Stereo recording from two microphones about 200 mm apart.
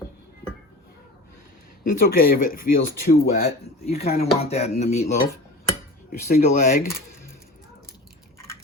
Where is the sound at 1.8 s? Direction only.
45° left (ahead or behind).